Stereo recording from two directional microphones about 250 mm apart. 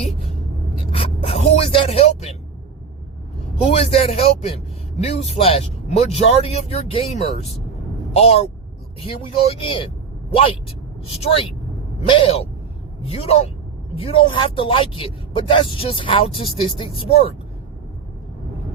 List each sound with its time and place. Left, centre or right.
0.9 s a sound: left
3.7 s speech: left
11.0 s speech: left